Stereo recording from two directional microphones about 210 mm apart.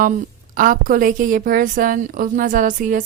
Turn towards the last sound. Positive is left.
turn(degrees=-40)  # may be behind; listen again after turning